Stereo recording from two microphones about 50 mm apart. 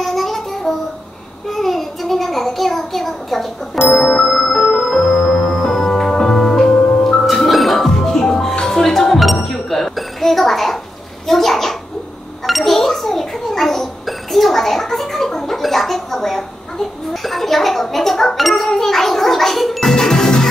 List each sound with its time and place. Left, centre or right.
0.0 s music: centre
1.5 s a sound: centre
4.0 s music: left
4.3 s music: centre
11.2 s bathtub: centre
12.4 s a sound: centre